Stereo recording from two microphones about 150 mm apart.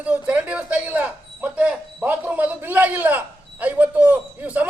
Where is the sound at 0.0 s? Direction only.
10° right (ahead or behind).